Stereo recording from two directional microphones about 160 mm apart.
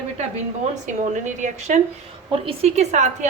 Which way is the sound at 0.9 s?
50° right (ahead or behind).